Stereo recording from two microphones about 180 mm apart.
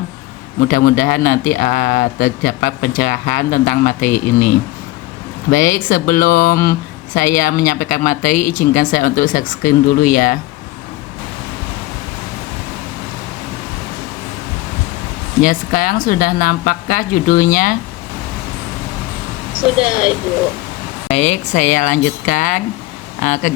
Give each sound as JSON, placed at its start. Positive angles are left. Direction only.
{"t": 0.7, "sound": "speech", "side_deg": 50}
{"t": 15.4, "sound": "speech", "side_deg": 50}
{"t": 21.1, "sound": "speech", "side_deg": 40}